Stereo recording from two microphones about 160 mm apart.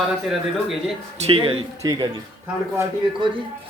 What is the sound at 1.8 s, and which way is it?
Speech, 25° right (ahead or behind).